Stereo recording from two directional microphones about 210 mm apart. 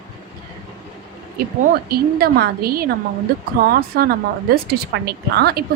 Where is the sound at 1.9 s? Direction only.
45° right (ahead or behind).